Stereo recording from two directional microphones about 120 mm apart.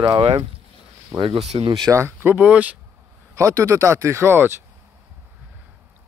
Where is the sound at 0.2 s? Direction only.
45° right (ahead or behind).